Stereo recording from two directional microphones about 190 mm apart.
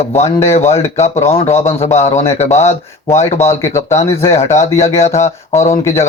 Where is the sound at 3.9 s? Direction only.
35° left (ahead or behind).